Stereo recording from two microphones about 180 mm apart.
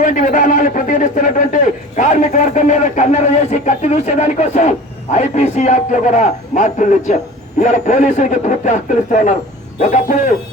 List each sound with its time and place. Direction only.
0.0 s a man's voice: 45° left (ahead or behind)